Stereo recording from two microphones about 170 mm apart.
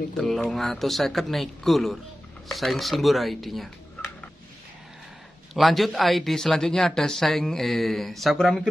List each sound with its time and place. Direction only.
0.2 s speech: centre (ahead or behind)
5.5 s speech: centre (ahead or behind)